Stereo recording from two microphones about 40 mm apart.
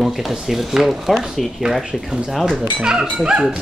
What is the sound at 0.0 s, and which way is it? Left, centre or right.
Speech, centre.